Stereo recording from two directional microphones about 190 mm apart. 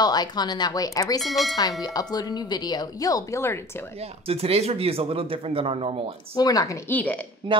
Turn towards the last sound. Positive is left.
turn(degrees=-30)  # may be behind; listen again after turning